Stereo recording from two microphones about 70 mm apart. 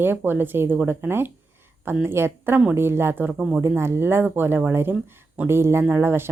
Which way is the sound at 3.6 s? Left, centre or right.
Right.